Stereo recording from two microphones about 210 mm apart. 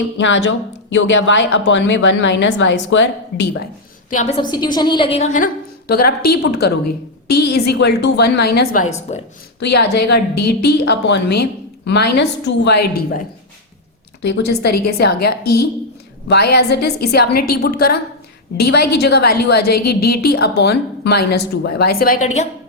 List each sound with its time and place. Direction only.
0.2 s a woman's voice: 60° left (ahead or behind)
4.1 s a woman's voice: 35° left (ahead or behind)
4.4 s a woman's voice: 20° left (ahead or behind)
5.9 s a woman's voice: 45° left (ahead or behind)
9.6 s a woman's voice: 50° left (ahead or behind)
14.2 s a woman's voice: 55° left (ahead or behind); by 22.4 s 35° left (ahead or behind)